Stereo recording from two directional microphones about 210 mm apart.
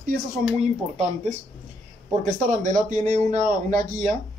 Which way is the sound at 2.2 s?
40° right (ahead or behind).